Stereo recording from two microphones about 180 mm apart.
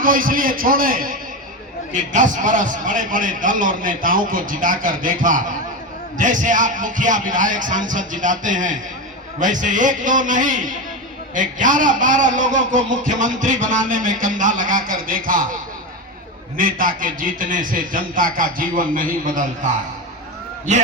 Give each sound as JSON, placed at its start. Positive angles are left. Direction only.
{"t": 0.0, "sound": "a man's voice", "side_deg": -50}
{"t": 16.6, "sound": "a man's voice", "side_deg": -50}